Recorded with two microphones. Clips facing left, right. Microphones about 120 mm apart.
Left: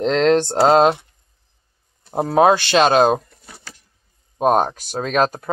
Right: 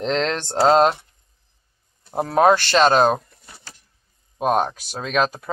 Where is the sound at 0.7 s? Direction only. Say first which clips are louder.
Left 1 dB; 15° left (ahead or behind).